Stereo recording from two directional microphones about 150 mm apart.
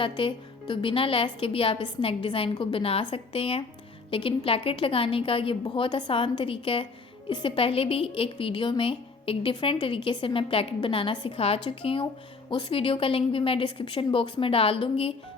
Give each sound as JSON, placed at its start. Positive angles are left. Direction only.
{"t": 0.0, "sound": "a woman's voice", "side_deg": 35}